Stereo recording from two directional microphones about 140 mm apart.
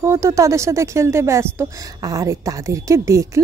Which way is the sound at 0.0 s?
20° right (ahead or behind).